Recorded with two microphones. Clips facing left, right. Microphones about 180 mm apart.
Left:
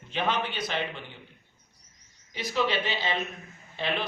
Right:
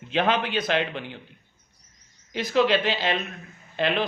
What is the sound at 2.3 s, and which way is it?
Speech, 90° right.